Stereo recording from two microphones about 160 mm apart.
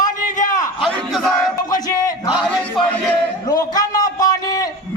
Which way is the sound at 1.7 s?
25° left (ahead or behind).